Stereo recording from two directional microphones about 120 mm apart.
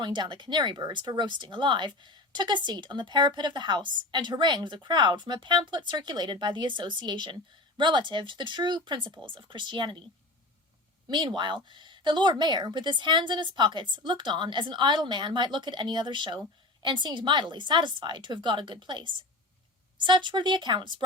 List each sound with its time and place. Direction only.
0.0 s speech: 40° right (ahead or behind)
11.1 s speech: 40° right (ahead or behind)